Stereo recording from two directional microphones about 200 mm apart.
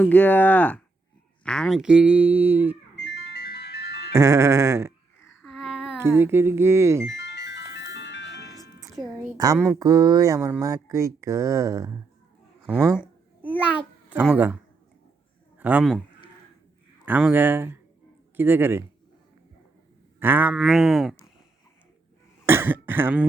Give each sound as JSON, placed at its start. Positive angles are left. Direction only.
{"t": 0.0, "sound": "speech", "side_deg": 10}
{"t": 3.1, "sound": "music", "side_deg": 50}
{"t": 4.1, "sound": "speech", "side_deg": -15}
{"t": 5.4, "sound": "a sound", "side_deg": 0}
{"t": 7.2, "sound": "music", "side_deg": 60}
{"t": 9.0, "sound": "a sound", "side_deg": 5}
{"t": 9.4, "sound": "speech", "side_deg": -15}
{"t": 13.6, "sound": "a child's voice", "side_deg": -10}
{"t": 17.1, "sound": "speech", "side_deg": -10}
{"t": 20.1, "sound": "a sound", "side_deg": -10}
{"t": 22.4, "sound": "speech", "side_deg": -10}